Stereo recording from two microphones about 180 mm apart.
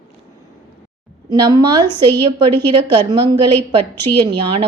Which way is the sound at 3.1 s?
25° right (ahead or behind).